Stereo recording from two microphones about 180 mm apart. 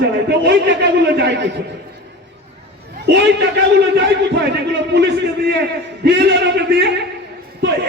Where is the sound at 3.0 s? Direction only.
65° right (ahead or behind).